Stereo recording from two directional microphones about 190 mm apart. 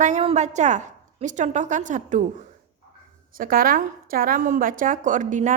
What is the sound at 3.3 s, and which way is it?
A woman's voice, 50° right (ahead or behind).